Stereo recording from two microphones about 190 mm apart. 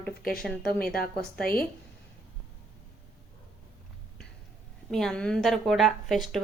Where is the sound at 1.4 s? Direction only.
50° left (ahead or behind).